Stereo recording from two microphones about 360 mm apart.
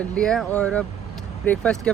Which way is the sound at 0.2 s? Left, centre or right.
Centre.